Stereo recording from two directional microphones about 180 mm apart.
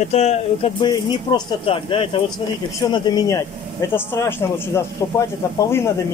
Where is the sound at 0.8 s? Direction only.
25° left (ahead or behind).